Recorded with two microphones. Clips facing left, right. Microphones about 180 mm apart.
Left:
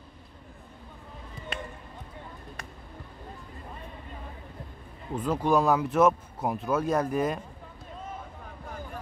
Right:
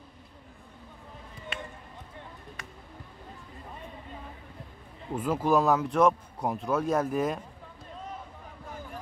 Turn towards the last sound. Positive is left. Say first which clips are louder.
# left 1 dB
turn(degrees=0)  # may be behind; listen again after turning